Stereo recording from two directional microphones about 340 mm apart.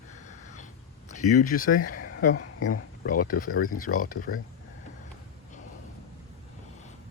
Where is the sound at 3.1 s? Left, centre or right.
Left.